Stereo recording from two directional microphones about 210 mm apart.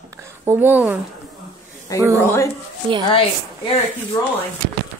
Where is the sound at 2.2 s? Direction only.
10° left (ahead or behind).